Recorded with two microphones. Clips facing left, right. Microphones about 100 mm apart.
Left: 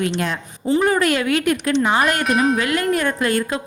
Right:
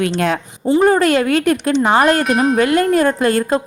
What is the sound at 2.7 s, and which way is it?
Speech, 30° right (ahead or behind).